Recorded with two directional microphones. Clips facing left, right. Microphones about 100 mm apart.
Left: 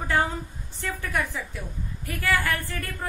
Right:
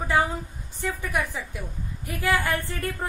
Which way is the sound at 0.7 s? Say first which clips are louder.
Right 1 dB; 15° right (ahead or behind).